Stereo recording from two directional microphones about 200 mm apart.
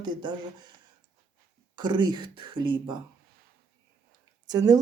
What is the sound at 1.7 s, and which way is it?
Speech, 20° right (ahead or behind).